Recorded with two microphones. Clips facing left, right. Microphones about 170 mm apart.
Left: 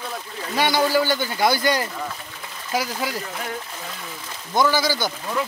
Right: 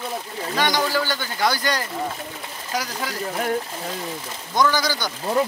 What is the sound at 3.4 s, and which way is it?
Speech, 40° right (ahead or behind).